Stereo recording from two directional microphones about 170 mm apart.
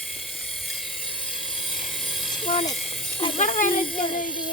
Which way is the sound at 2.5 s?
30° left (ahead or behind).